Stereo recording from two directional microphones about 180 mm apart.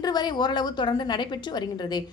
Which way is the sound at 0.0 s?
25° left (ahead or behind).